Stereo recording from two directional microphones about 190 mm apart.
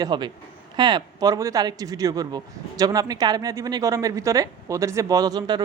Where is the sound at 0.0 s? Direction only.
25° right (ahead or behind).